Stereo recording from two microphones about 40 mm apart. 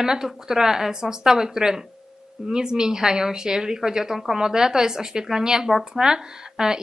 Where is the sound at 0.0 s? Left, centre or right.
Centre.